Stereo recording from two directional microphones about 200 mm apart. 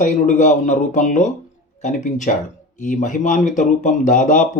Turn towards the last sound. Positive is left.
turn(degrees=40)  # may be behind; listen again after turning